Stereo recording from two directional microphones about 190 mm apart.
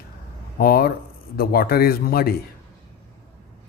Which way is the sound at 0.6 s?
50° left (ahead or behind).